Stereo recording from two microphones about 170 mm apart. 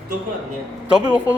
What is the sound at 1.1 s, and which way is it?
Speech, 10° right (ahead or behind).